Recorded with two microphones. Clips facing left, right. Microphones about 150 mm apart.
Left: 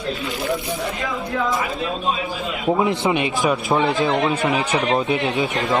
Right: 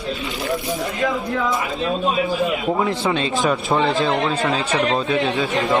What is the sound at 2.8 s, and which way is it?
Speech, 15° left (ahead or behind).